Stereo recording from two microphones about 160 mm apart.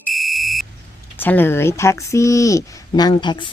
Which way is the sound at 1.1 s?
10° left (ahead or behind).